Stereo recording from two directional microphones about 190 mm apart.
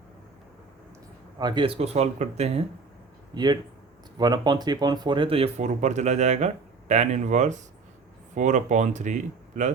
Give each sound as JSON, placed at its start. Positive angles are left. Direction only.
{"t": 1.4, "sound": "speech", "side_deg": -25}
{"t": 3.3, "sound": "speech", "side_deg": -20}